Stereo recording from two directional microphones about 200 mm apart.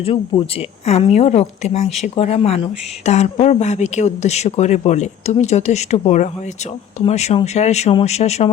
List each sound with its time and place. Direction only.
0.0 s speech: 30° left (ahead or behind)